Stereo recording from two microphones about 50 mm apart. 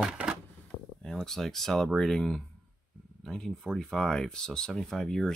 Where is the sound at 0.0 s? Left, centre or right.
Centre.